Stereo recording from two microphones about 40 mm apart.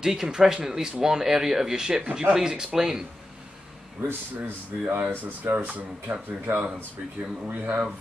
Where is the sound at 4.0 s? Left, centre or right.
Right.